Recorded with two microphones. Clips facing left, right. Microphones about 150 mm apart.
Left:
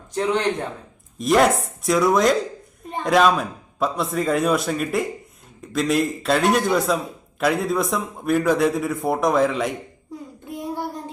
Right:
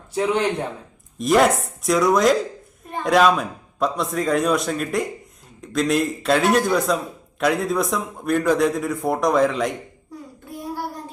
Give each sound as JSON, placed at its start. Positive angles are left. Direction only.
{"t": 0.1, "sound": "a man's voice", "side_deg": -5}
{"t": 10.5, "sound": "child singing", "side_deg": 20}